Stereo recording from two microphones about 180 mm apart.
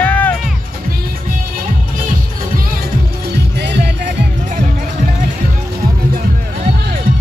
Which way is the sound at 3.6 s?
70° right (ahead or behind).